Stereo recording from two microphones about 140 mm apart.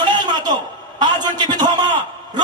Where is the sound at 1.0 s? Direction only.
30° right (ahead or behind).